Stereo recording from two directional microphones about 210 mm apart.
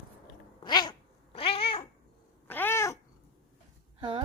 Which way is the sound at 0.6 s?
20° left (ahead or behind).